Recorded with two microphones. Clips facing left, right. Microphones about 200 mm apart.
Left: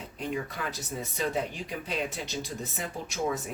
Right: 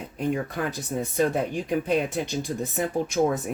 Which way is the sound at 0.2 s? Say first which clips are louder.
Right 7 dB; 50° right (ahead or behind).